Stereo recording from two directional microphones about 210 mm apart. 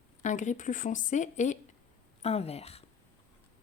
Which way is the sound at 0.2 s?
35° left (ahead or behind).